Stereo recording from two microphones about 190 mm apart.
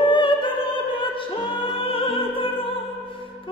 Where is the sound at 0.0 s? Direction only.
25° left (ahead or behind).